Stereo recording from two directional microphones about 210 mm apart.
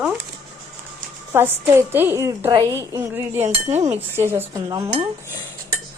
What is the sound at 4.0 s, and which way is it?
A woman's voice, 10° right (ahead or behind).